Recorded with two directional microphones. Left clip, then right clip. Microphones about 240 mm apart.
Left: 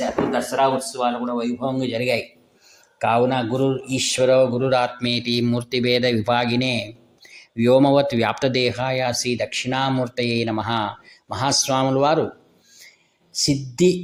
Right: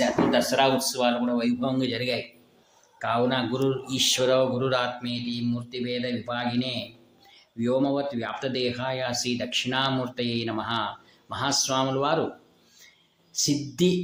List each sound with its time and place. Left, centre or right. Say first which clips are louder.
0.0 s speech: left 1 dB; centre
3.0 s speech: left 6 dB; left
5.0 s speech: left 9 dB; left
13.3 s speech: left 4 dB; left